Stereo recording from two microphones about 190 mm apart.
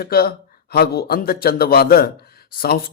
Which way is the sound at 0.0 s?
50° left (ahead or behind).